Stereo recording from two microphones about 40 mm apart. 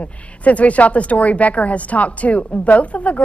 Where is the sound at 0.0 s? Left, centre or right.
Left.